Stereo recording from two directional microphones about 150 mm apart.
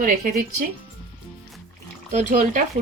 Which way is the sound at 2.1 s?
60° right (ahead or behind).